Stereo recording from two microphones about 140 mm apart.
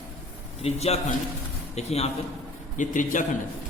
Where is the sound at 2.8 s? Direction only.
70° left (ahead or behind).